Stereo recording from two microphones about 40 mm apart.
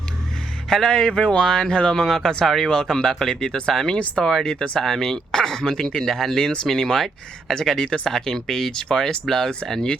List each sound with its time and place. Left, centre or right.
0.7 s speech: centre
2.0 s speech: centre